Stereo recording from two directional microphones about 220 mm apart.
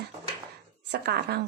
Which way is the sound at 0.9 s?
45° right (ahead or behind).